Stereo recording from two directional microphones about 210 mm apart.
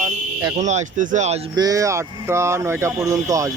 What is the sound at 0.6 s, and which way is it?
Speech, 35° right (ahead or behind).